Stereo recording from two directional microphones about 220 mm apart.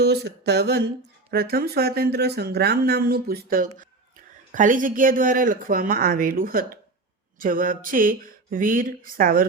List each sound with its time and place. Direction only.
0.0 s speech: 50° right (ahead or behind)